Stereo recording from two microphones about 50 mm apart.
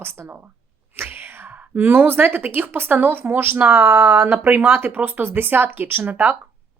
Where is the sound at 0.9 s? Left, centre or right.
Right.